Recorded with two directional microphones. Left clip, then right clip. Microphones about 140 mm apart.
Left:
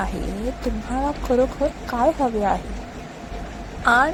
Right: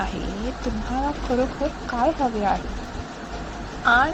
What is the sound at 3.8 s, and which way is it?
Speech, 25° left (ahead or behind).